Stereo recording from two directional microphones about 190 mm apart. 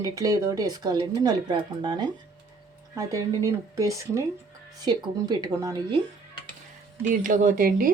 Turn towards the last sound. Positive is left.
turn(degrees=-45)  # may be behind; listen again after turning